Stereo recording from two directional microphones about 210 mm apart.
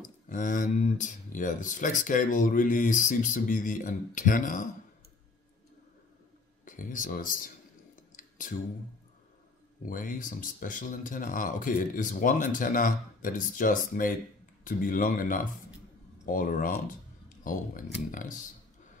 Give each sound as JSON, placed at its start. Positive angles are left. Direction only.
{"t": 0.3, "sound": "speech", "side_deg": 40}
{"t": 6.6, "sound": "speech", "side_deg": 40}
{"t": 8.2, "sound": "a sound", "side_deg": 40}
{"t": 9.8, "sound": "speech", "side_deg": 40}